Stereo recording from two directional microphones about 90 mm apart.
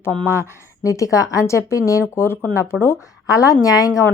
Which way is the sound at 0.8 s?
35° left (ahead or behind).